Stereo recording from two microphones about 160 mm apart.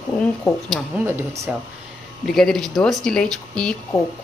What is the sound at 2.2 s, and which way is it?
Speech, centre (ahead or behind).